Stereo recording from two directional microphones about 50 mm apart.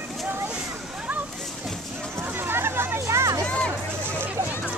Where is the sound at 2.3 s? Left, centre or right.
Right.